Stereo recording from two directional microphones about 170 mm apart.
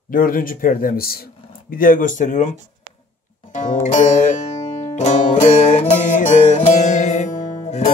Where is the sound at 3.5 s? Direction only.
45° left (ahead or behind).